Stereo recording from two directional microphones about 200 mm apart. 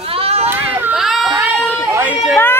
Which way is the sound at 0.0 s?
30° right (ahead or behind).